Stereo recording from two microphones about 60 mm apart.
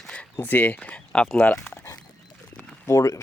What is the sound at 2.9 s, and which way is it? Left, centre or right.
Speech, left.